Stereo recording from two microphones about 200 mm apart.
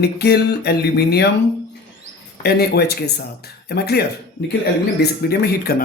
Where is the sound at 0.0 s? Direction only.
55° left (ahead or behind).